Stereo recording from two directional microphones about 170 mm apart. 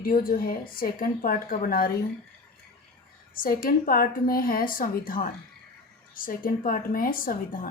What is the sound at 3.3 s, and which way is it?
A woman's voice, 55° left (ahead or behind).